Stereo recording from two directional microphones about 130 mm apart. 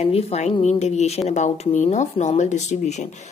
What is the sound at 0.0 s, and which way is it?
Speech, 55° left (ahead or behind).